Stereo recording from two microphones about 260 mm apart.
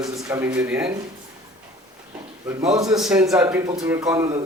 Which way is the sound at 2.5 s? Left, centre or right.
Centre.